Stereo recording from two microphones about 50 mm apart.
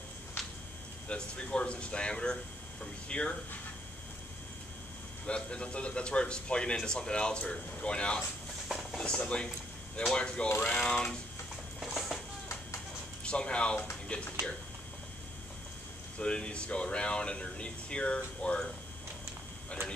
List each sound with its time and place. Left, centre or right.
1.0 s a man's voice: left
5.2 s a man's voice: centre
11.8 s a sound: centre
13.2 s a man's voice: centre
16.2 s a man's voice: centre